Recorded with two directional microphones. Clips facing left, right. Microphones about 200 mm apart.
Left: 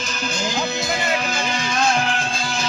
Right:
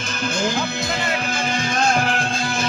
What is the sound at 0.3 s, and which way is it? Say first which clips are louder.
Music: right 1 dB; 55° right (ahead or behind).